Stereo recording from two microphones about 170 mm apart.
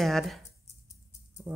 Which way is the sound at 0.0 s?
Centre (ahead or behind).